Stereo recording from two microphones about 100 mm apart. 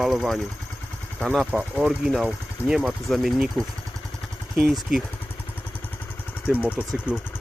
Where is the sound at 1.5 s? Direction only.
10° right (ahead or behind).